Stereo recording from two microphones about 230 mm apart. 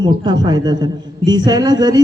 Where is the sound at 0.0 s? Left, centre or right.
Centre.